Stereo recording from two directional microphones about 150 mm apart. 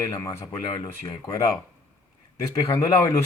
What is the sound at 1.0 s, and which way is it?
Speech, 25° left (ahead or behind).